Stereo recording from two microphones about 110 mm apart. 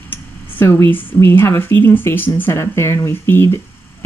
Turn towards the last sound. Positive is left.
turn(degrees=25)  # may be behind; listen again after turning